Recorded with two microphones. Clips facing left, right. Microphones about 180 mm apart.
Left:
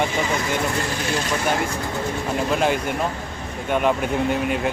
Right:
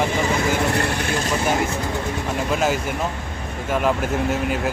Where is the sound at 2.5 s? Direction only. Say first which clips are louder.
Even; 5° right (ahead or behind).